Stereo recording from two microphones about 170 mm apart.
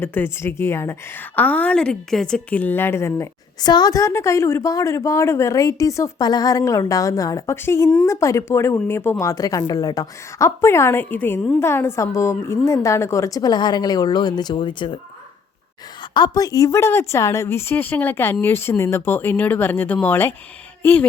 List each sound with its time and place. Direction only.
0.0 s a woman's voice: 10° left (ahead or behind); by 14.9 s 30° left (ahead or behind)
16.1 s a woman's voice: 25° left (ahead or behind)